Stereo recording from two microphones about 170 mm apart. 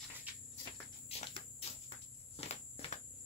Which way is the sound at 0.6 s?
35° left (ahead or behind).